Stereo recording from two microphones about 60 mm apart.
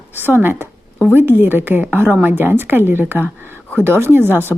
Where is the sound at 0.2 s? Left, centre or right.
Right.